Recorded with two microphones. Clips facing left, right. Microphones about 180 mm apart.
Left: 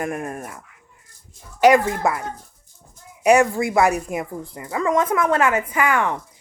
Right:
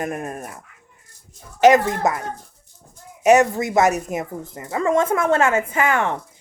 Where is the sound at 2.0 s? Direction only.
20° right (ahead or behind).